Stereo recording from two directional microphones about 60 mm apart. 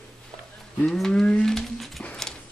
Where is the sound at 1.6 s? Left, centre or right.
Centre.